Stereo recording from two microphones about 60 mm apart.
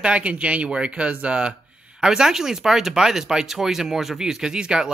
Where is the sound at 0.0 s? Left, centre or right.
Centre.